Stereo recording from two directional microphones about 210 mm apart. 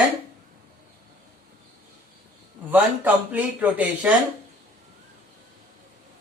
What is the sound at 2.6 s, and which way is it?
Speech, 10° right (ahead or behind).